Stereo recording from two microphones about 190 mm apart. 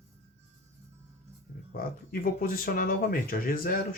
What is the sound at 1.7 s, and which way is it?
Speech, 50° left (ahead or behind).